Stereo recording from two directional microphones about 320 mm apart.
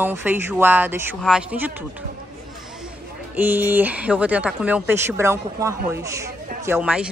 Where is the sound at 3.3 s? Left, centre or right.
Centre.